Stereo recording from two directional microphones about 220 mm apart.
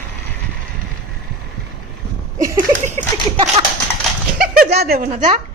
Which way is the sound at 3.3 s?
25° right (ahead or behind).